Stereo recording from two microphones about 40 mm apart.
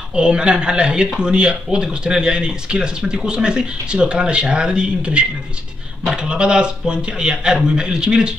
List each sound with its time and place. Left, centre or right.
0.1 s speech: right